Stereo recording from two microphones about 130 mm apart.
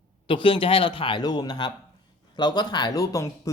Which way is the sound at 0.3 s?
40° left (ahead or behind).